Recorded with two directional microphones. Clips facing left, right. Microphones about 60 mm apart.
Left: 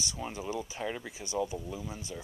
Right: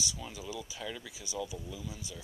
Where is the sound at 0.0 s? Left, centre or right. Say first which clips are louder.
Left 4 dB; left.